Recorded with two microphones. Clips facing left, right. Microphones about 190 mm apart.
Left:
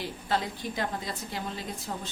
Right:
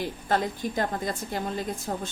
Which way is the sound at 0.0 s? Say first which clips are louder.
Right 4 dB; 50° right (ahead or behind).